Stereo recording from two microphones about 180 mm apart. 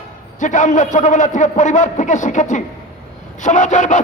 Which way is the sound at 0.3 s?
45° left (ahead or behind).